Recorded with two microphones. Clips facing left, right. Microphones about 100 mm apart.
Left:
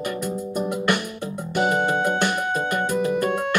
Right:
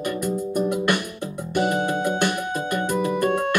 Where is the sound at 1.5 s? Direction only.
55° left (ahead or behind).